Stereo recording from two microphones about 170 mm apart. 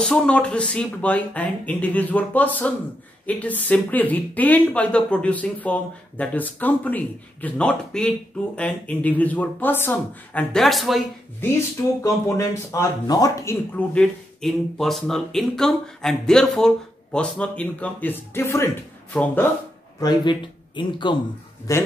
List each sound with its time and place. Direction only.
0.0 s speech: 5° left (ahead or behind)
12.0 s speech: 15° left (ahead or behind)
20.0 s speech: 25° left (ahead or behind)